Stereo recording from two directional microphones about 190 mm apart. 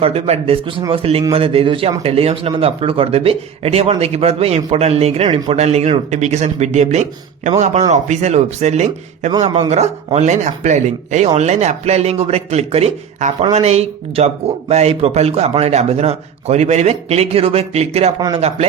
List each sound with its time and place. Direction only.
0.0 s a man's voice: 30° right (ahead or behind)